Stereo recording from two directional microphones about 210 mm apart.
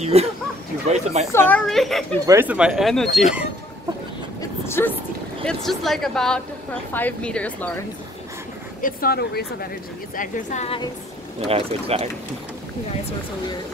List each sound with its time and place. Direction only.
0.0 s speech: 30° right (ahead or behind)
1.3 s speech: 10° left (ahead or behind)
2.2 s speech: 10° right (ahead or behind)
4.4 s vehicle: 10° left (ahead or behind)
5.4 s speech: 5° left (ahead or behind)
8.8 s a woman's voice: 45° left (ahead or behind)
11.4 s speech: 30° right (ahead or behind)